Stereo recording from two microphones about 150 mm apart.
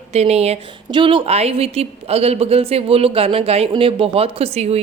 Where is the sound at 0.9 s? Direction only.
30° right (ahead or behind).